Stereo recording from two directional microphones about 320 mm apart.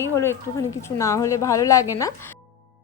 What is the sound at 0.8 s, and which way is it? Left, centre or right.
A woman's voice, centre.